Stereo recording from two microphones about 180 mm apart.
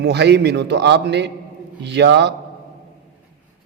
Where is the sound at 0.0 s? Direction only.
70° right (ahead or behind).